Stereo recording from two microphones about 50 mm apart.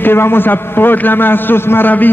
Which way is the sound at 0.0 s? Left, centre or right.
Left.